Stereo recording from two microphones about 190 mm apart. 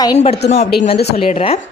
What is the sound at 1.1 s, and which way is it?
Speech, 30° left (ahead or behind).